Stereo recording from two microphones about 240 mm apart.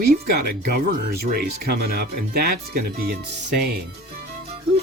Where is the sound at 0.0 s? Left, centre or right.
Right.